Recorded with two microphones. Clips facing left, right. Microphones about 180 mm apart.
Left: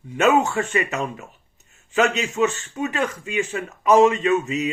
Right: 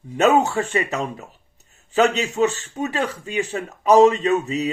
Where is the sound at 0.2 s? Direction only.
35° right (ahead or behind).